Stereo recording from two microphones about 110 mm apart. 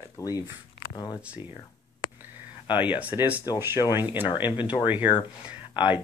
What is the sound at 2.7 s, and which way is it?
Speech, 15° right (ahead or behind).